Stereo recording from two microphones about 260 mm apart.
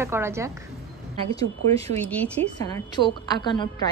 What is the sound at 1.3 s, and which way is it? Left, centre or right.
Speech, right.